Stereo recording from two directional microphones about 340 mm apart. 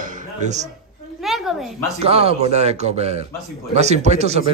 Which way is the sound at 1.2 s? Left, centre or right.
Centre.